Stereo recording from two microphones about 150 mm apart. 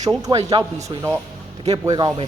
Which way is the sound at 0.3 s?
25° right (ahead or behind).